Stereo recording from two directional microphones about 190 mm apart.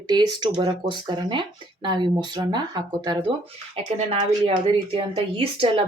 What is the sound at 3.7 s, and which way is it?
Speech, 30° right (ahead or behind).